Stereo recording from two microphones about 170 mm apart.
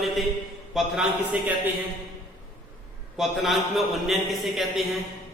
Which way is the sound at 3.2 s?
Centre (ahead or behind).